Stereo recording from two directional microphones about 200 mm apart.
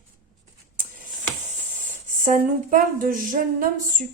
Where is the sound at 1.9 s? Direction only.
40° right (ahead or behind).